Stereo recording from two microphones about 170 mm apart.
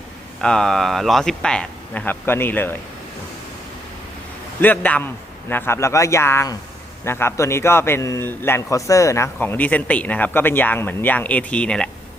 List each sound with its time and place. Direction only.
0.4 s speech: 5° left (ahead or behind)
4.6 s speech: 10° left (ahead or behind)